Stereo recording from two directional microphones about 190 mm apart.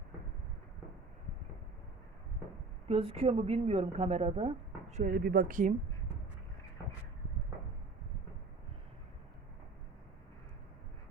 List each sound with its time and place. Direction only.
2.9 s a woman's voice: 30° right (ahead or behind)
5.1 s speech: 55° right (ahead or behind)